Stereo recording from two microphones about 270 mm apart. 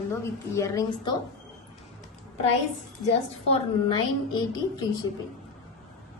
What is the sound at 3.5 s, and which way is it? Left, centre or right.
A woman's voice, centre.